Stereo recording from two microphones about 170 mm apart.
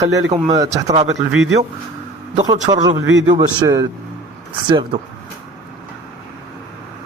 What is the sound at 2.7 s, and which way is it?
A man's voice, 25° right (ahead or behind).